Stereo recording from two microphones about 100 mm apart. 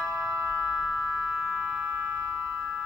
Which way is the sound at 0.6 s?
5° left (ahead or behind).